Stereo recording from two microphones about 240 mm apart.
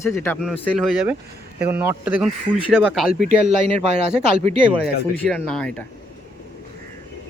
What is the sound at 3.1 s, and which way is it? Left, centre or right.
Speech, left.